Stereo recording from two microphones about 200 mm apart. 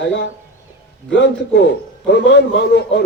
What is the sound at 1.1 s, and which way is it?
A man's voice, 60° left (ahead or behind).